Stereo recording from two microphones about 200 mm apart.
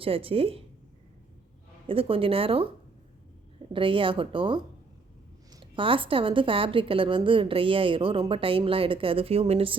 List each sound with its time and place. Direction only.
0.0 s a woman's voice: 30° right (ahead or behind)
1.9 s a woman's voice: 25° right (ahead or behind)
3.7 s a woman's voice: 25° right (ahead or behind)